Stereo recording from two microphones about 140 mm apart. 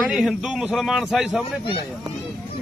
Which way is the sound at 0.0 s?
5° right (ahead or behind).